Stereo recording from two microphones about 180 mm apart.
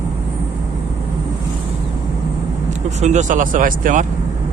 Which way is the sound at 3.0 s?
40° right (ahead or behind).